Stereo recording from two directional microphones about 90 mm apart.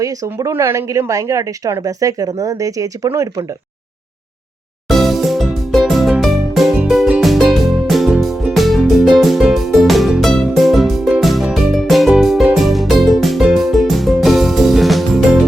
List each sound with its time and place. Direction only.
0.0 s speech: 40° right (ahead or behind)
0.5 s speech: 30° right (ahead or behind)
4.9 s music: centre (ahead or behind)